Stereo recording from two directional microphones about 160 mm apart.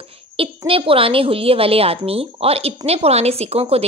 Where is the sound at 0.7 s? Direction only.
35° right (ahead or behind).